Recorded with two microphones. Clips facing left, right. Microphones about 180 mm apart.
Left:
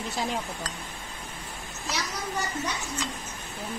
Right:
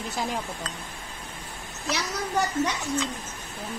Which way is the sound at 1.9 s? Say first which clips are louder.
Right 5 dB; 70° right (ahead or behind).